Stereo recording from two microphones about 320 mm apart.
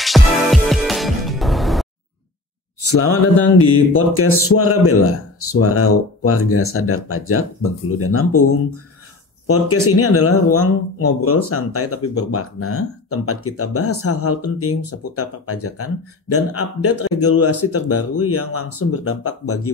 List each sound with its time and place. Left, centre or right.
0.0 s music: centre
2.8 s mantra: left
3.5 s speech: left
9.5 s speech: left